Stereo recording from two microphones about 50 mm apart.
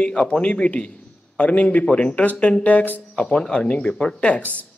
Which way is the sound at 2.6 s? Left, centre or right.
Left.